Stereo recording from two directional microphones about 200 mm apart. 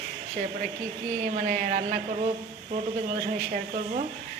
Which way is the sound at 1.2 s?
40° right (ahead or behind).